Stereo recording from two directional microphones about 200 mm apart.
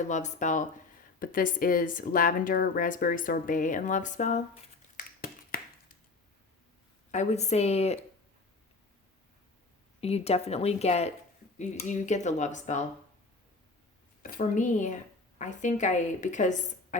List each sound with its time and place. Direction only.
0.1 s a woman's voice: 35° left (ahead or behind)
4.9 s a sound: 45° left (ahead or behind)
7.1 s a woman's voice: 35° left (ahead or behind)
10.0 s a woman's voice: 30° left (ahead or behind)
14.2 s a woman's voice: 45° left (ahead or behind)